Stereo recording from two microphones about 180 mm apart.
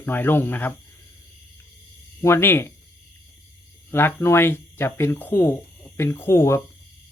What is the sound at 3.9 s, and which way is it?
Speech, 10° left (ahead or behind).